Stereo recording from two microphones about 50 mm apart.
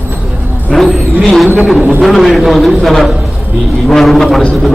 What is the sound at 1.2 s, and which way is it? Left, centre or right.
A man's voice, centre.